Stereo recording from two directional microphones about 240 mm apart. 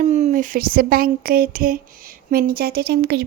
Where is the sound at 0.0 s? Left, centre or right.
Right.